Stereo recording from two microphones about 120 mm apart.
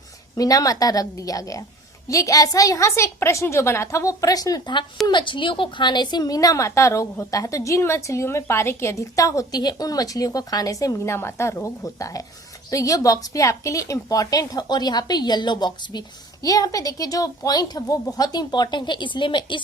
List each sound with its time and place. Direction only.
0.3 s a woman's voice: 30° left (ahead or behind)